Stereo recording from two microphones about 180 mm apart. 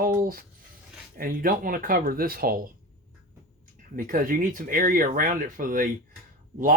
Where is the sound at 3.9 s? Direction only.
50° right (ahead or behind).